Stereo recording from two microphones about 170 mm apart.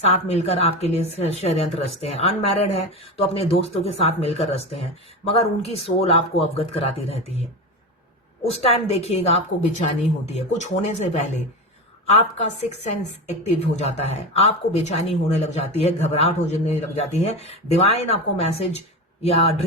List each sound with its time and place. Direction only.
0.0 s speech: 40° left (ahead or behind)
8.4 s speech: 35° left (ahead or behind)